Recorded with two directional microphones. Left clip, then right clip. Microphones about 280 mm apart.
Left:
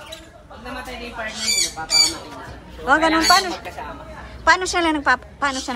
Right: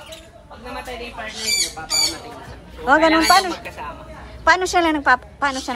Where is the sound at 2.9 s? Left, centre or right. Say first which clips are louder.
Right 1 dB; centre.